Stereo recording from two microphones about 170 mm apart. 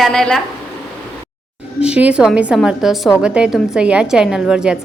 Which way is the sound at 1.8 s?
5° right (ahead or behind).